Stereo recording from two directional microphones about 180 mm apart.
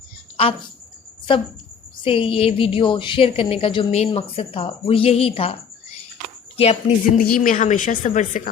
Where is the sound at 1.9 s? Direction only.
30° left (ahead or behind).